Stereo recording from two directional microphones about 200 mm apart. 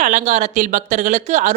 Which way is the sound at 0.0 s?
40° right (ahead or behind).